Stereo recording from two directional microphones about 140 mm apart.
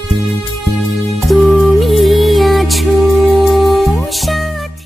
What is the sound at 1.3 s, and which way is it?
Music, centre (ahead or behind).